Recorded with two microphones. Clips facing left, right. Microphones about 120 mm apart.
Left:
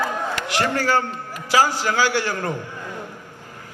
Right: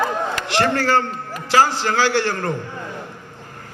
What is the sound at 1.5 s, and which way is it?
Speech, 15° left (ahead or behind).